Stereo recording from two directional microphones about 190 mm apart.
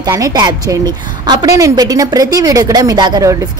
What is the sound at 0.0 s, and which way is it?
Speech, 20° right (ahead or behind).